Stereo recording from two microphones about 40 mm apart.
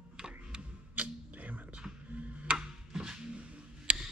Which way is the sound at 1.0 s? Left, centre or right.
Right.